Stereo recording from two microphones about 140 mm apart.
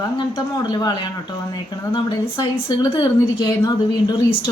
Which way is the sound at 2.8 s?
35° left (ahead or behind).